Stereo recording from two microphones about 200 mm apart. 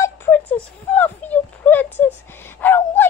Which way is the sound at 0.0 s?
10° left (ahead or behind).